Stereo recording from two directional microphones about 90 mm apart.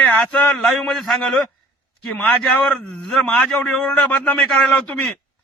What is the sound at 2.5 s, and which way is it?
Speech, 5° left (ahead or behind).